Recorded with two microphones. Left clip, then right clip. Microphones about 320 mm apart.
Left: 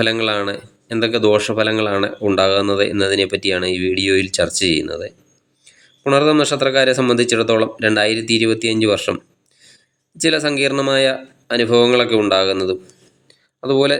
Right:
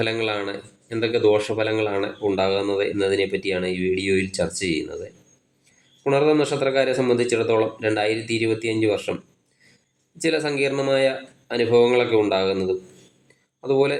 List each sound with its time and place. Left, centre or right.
0.0 s speech: left
6.0 s speech: left
10.2 s speech: left